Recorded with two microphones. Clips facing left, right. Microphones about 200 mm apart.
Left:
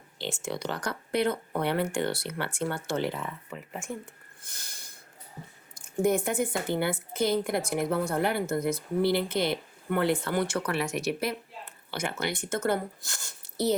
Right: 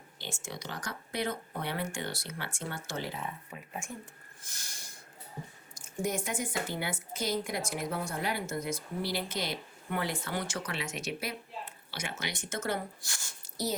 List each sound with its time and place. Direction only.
0.2 s speech: 65° left (ahead or behind)
4.5 s a sound: 55° left (ahead or behind)
6.0 s speech: 60° left (ahead or behind)